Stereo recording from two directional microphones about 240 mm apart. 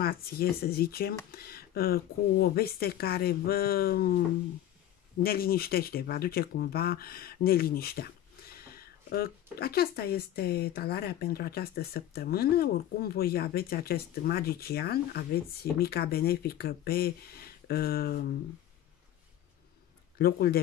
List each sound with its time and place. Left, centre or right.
0.0 s speech: left
5.2 s speech: left
20.2 s speech: left